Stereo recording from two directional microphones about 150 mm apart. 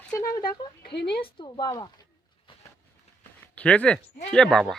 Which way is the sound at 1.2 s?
35° left (ahead or behind).